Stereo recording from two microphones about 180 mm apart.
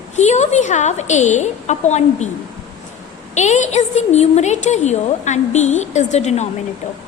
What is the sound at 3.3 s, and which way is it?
A woman's voice, 40° left (ahead or behind).